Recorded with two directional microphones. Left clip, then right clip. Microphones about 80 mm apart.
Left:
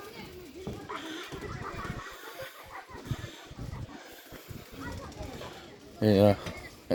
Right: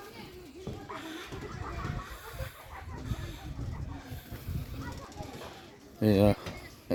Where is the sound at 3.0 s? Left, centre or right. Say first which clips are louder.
Left 1 dB; right.